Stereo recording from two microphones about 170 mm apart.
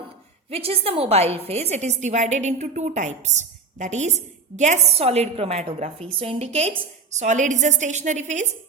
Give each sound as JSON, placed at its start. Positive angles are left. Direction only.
{"t": 0.5, "sound": "a woman's voice", "side_deg": -35}